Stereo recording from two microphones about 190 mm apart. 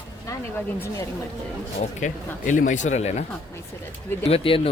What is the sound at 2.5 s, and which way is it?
Speech, 40° left (ahead or behind).